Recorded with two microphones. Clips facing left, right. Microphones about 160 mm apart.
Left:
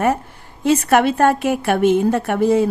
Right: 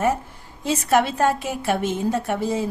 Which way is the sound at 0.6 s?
65° left (ahead or behind).